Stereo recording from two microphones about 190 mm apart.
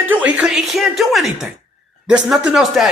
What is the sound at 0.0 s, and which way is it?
A woman's voice, 10° right (ahead or behind).